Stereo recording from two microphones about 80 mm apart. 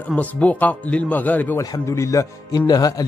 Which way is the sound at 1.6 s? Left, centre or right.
Left.